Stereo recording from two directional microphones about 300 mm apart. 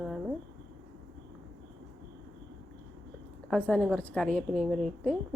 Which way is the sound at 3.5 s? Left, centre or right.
Centre.